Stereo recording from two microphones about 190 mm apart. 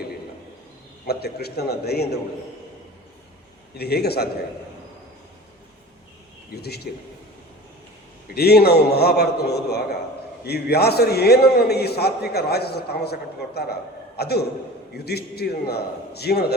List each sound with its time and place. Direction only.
1.0 s a man's voice: 55° left (ahead or behind)
3.8 s a man's voice: 55° left (ahead or behind)
6.6 s a man's voice: 60° left (ahead or behind)
8.3 s a man's voice: 55° left (ahead or behind)